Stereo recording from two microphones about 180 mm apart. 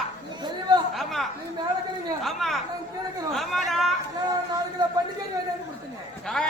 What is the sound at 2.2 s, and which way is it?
Chatter, centre (ahead or behind).